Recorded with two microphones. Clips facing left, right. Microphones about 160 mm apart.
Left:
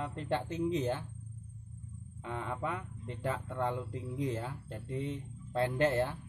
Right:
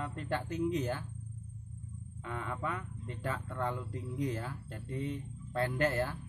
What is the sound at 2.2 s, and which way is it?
Speech, 20° left (ahead or behind).